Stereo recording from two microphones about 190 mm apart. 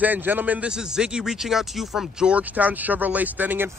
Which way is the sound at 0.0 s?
10° right (ahead or behind).